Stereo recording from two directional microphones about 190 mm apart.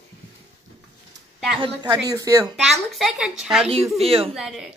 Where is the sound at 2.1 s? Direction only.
20° right (ahead or behind).